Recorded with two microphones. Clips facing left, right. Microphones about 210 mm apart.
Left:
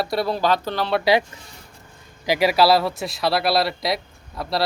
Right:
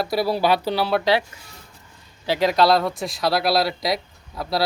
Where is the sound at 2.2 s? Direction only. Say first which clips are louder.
Left 1 dB; 10° left (ahead or behind).